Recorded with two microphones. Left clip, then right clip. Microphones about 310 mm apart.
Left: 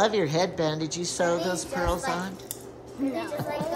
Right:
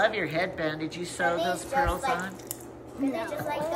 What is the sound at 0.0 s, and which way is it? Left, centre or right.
A woman's voice, centre.